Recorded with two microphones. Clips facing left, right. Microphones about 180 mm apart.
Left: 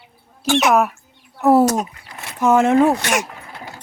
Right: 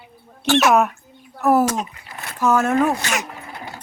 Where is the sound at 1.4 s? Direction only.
30° left (ahead or behind).